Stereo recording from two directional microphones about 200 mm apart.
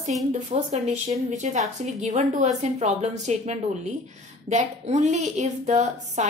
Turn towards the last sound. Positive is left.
turn(degrees=-35)  # may be behind; listen again after turning